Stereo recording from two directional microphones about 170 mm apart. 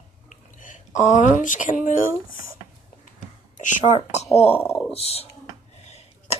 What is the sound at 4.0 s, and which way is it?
Speech, 40° left (ahead or behind).